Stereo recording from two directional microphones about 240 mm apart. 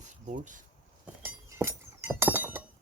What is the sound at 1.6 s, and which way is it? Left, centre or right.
Glass, centre.